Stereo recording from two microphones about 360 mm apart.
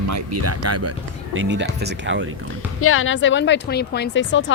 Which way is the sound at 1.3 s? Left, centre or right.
Right.